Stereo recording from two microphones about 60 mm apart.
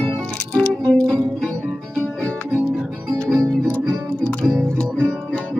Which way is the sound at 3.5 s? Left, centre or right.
Centre.